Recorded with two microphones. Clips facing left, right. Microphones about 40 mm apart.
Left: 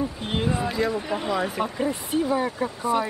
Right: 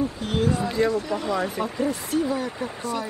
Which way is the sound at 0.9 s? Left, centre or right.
Left.